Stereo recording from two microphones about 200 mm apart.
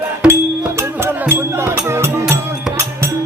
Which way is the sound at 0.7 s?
10° right (ahead or behind).